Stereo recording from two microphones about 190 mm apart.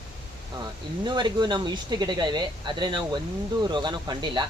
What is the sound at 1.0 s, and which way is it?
Speech, 25° right (ahead or behind).